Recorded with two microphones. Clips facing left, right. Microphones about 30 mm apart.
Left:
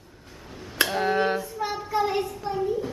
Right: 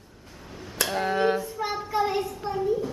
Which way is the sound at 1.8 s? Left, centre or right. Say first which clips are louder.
Left 1 dB; centre.